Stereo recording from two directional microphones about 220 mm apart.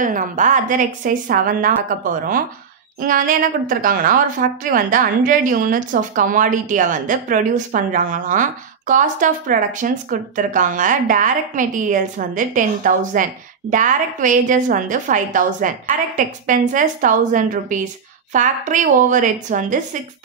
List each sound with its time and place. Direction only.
0.0 s a woman's voice: 35° right (ahead or behind)